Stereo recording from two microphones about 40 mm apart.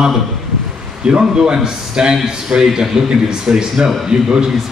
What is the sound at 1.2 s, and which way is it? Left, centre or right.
A man's voice, centre.